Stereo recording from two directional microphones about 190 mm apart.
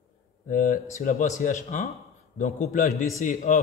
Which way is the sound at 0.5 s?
50° left (ahead or behind).